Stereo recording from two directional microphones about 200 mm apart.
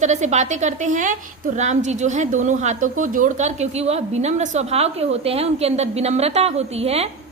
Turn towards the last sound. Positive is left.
turn(degrees=-30)  # may be behind; listen again after turning